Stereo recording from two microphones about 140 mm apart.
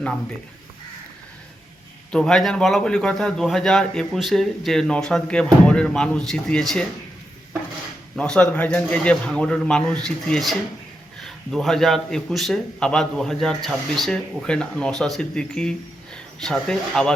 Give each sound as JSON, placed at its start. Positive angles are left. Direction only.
{"t": 2.1, "sound": "a man's voice", "side_deg": 5}
{"t": 8.1, "sound": "a man's voice", "side_deg": 5}